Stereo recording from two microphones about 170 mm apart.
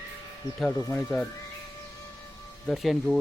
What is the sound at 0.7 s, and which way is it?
Speech, 20° left (ahead or behind).